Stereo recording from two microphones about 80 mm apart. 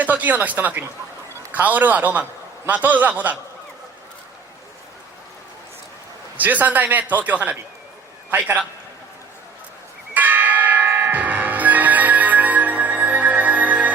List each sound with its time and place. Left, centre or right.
0.0 s a man's voice: right
6.3 s a man's voice: right
10.2 s church bell: right